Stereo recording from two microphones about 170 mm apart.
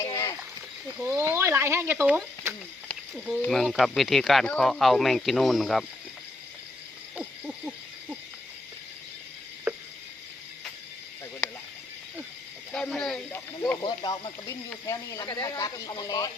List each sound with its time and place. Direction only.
0.0 s splash: 20° left (ahead or behind)
1.0 s speech: 15° right (ahead or behind)
3.4 s speech: centre (ahead or behind)
7.2 s owl: 5° right (ahead or behind)
9.7 s a sound: 10° right (ahead or behind)
12.7 s a sound: 5° left (ahead or behind)
13.6 s speech: 25° left (ahead or behind)